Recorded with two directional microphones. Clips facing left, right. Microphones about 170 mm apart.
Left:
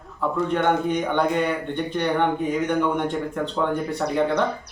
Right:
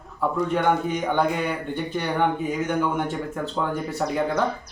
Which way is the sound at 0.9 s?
5° right (ahead or behind).